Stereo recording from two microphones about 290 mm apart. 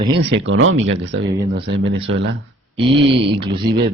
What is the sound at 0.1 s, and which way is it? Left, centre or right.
Speech, right.